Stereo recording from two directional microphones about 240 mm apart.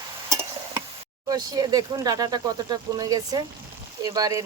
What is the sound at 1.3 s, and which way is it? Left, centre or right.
Speech, centre.